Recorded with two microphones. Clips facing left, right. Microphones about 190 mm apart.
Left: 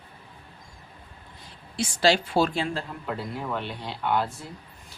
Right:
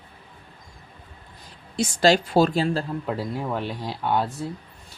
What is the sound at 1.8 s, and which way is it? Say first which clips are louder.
A woman's voice: right 4 dB; 45° right (ahead or behind).